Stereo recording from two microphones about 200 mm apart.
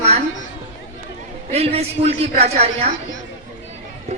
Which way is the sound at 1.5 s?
30° right (ahead or behind).